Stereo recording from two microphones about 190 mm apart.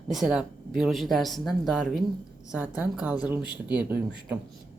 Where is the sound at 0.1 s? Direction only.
Centre (ahead or behind).